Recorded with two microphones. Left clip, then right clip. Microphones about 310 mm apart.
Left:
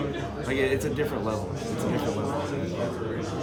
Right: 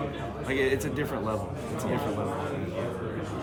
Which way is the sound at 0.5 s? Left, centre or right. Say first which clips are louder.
Left 1 dB; centre.